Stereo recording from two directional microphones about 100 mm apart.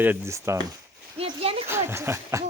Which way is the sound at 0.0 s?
20° right (ahead or behind).